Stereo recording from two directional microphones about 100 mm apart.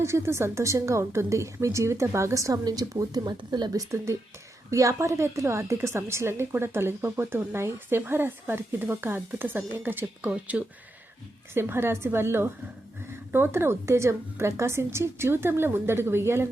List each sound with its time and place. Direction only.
0.0 s a woman's voice: 25° right (ahead or behind)